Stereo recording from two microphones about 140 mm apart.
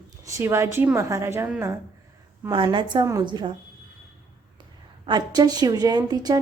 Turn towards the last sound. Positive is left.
turn(degrees=-30)  # may be behind; listen again after turning